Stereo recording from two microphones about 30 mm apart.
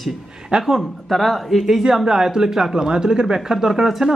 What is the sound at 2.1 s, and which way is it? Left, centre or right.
Speech, centre.